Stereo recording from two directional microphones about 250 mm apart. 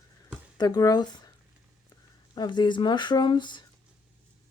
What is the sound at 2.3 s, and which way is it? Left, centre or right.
Speech, centre.